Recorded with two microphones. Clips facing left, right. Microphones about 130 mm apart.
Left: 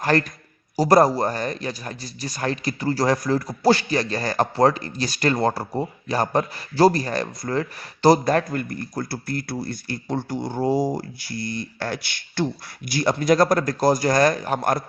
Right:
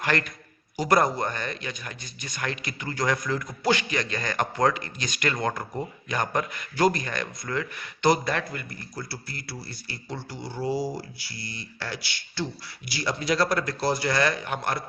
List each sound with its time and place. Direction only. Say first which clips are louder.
0.0 s a man's voice: left 6 dB; 35° left (ahead or behind)